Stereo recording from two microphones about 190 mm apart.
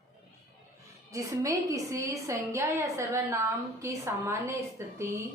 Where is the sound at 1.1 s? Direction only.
15° right (ahead or behind).